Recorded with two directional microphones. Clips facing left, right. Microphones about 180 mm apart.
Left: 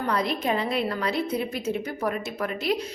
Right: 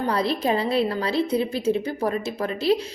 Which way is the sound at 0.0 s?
30° right (ahead or behind).